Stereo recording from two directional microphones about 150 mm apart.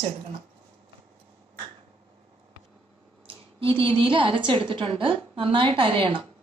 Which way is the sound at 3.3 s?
35° right (ahead or behind).